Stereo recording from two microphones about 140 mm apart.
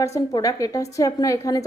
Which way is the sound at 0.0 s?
25° left (ahead or behind).